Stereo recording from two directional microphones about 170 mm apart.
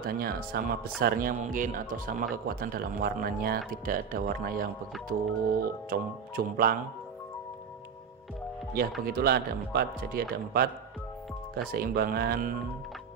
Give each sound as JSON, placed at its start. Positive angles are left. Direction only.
{"t": 0.0, "sound": "speech", "side_deg": -60}
{"t": 9.0, "sound": "speech", "side_deg": -65}
{"t": 11.7, "sound": "speech", "side_deg": -60}